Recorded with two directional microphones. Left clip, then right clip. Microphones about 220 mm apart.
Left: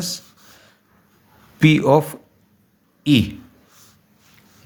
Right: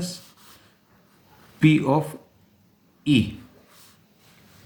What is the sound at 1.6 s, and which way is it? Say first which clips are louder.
A man's voice: left 6 dB; 45° left (ahead or behind).